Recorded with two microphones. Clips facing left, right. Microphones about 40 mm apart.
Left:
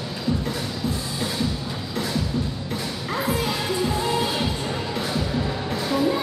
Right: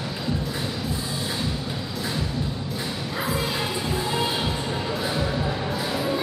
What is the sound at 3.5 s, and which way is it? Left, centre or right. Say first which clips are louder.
Music: left 3 dB; right.